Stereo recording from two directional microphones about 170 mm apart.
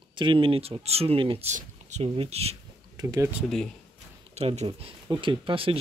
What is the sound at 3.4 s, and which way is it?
Speech, centre (ahead or behind).